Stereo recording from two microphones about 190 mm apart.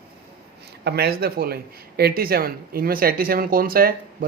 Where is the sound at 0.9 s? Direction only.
55° right (ahead or behind).